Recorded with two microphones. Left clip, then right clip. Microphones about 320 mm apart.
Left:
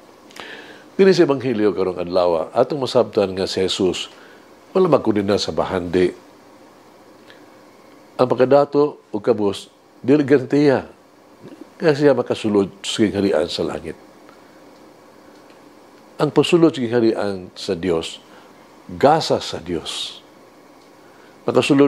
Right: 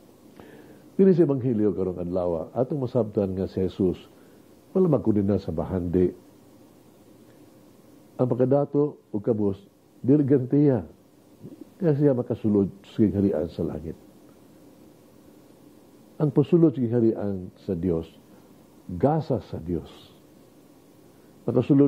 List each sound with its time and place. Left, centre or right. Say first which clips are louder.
0.4 s speech: left 13 dB; centre
8.2 s speech: left 9 dB; centre
10.0 s speech: left 6 dB; centre
16.2 s speech: left 6 dB; centre
21.5 s speech: left 6 dB; centre